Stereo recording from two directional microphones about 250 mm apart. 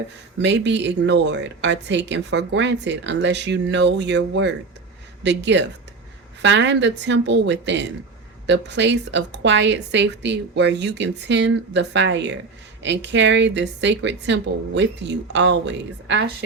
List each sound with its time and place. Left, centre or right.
0.4 s speech: right